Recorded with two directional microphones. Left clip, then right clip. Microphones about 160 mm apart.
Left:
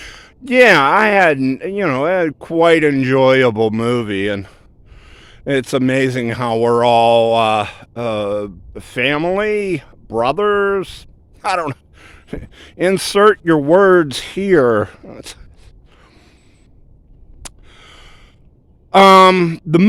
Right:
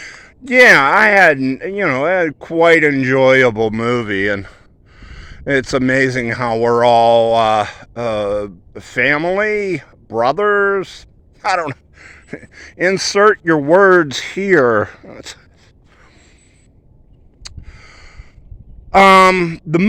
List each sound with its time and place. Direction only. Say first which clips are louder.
0.0 s speech: right 1 dB; 55° left (ahead or behind)
16.0 s a sound: right 1 dB; 55° left (ahead or behind)
17.4 s gasp: right 1 dB; 55° left (ahead or behind)
18.9 s speech: left 1 dB; 55° left (ahead or behind)